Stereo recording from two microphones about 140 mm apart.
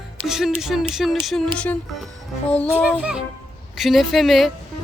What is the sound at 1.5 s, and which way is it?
Speech, 10° left (ahead or behind).